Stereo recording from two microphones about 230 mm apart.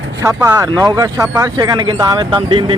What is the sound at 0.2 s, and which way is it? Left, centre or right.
Speech, centre.